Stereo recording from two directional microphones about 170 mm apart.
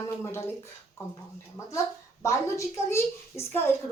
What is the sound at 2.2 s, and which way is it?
A woman's voice, 15° left (ahead or behind).